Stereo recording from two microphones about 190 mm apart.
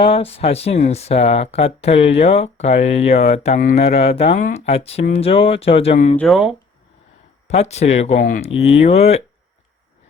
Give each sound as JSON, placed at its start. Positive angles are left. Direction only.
{"t": 0.0, "sound": "speech", "side_deg": 30}
{"t": 6.1, "sound": "speech", "side_deg": 0}
{"t": 7.4, "sound": "speech", "side_deg": 35}